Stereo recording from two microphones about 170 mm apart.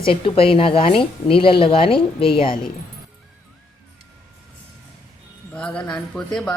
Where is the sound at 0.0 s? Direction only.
30° left (ahead or behind).